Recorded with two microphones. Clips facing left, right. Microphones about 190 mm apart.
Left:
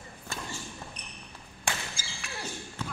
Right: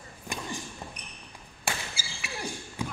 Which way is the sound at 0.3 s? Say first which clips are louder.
Right 3 dB; 15° right (ahead or behind).